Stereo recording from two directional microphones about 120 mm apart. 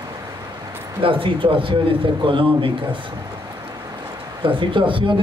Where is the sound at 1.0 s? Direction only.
45° right (ahead or behind).